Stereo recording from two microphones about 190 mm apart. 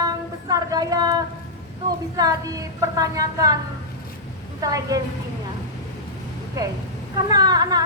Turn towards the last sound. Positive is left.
turn(degrees=-20)  # may be behind; listen again after turning